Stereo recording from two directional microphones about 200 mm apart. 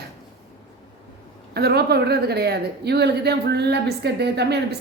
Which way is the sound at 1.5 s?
50° right (ahead or behind).